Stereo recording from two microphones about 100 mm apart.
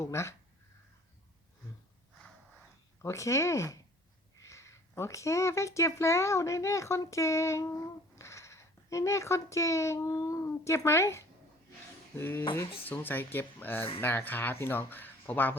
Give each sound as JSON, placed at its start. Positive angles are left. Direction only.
{"t": 0.0, "sound": "speech", "side_deg": 30}
{"t": 3.0, "sound": "speech", "side_deg": 30}